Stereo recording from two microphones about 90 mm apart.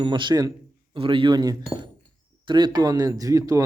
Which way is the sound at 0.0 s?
60° right (ahead or behind).